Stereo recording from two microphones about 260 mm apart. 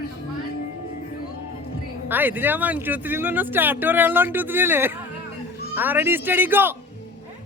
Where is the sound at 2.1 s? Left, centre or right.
Centre.